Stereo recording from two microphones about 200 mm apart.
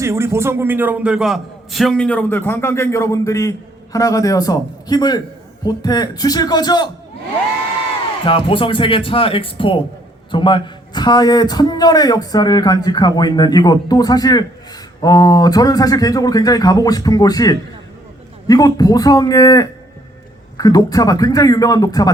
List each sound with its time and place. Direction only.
0.0 s a man's voice: 15° right (ahead or behind); by 6.9 s 20° left (ahead or behind)
8.2 s a man's voice: 25° left (ahead or behind)